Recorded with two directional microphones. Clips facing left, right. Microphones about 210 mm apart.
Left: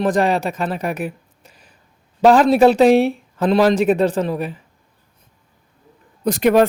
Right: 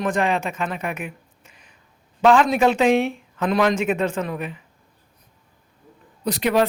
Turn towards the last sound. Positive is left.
turn(degrees=45)  # may be behind; listen again after turning